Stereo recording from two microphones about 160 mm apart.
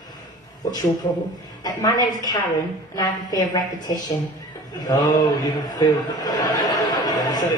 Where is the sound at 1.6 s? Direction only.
25° left (ahead or behind).